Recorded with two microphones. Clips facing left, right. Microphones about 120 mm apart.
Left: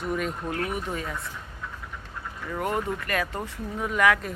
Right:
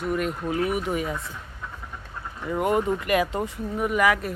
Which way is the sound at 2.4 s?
10° right (ahead or behind).